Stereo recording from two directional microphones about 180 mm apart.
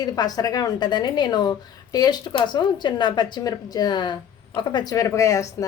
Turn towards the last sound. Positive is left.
turn(degrees=15)  # may be behind; listen again after turning